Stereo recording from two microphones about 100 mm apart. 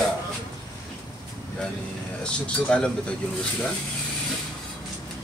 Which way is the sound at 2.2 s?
10° left (ahead or behind).